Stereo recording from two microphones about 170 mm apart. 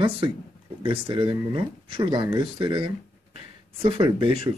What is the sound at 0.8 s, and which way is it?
Speech, 30° right (ahead or behind).